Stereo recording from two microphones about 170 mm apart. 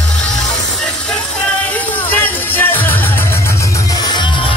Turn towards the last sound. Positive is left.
turn(degrees=10)  # may be behind; listen again after turning